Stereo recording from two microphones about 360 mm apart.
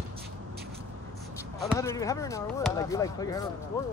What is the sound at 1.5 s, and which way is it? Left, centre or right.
Speech, centre.